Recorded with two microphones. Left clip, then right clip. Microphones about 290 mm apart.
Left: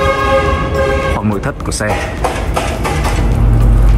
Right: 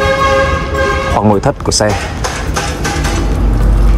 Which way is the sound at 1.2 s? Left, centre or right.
Centre.